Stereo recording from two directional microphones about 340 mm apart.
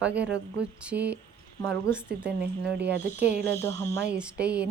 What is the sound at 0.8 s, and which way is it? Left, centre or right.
A child's voice, centre.